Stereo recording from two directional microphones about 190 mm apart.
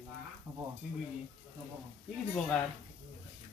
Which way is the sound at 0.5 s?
10° right (ahead or behind).